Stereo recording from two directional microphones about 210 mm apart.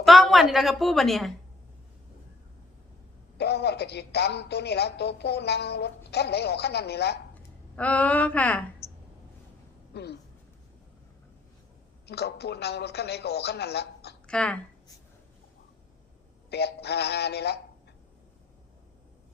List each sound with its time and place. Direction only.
0.0 s a woman's voice: centre (ahead or behind)
3.3 s a woman's voice: 50° left (ahead or behind)
7.3 s speech: 5° left (ahead or behind)
8.8 s a sound: 30° left (ahead or behind)
9.9 s speech: 50° left (ahead or behind)
12.0 s a woman's voice: 50° left (ahead or behind)
14.3 s speech: 5° left (ahead or behind)
16.5 s a woman's voice: 50° left (ahead or behind)